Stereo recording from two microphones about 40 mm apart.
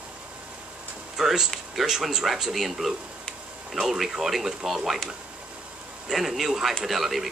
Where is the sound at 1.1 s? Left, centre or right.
Centre.